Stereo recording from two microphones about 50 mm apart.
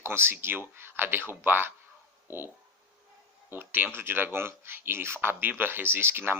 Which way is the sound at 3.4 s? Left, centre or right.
Right.